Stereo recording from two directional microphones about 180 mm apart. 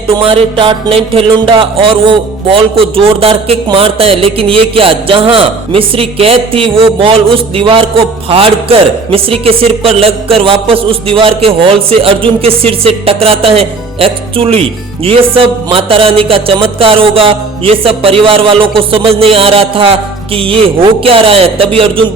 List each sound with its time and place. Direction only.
0.2 s music: 30° right (ahead or behind)